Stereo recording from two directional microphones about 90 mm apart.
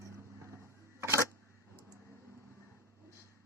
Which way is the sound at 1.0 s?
30° right (ahead or behind).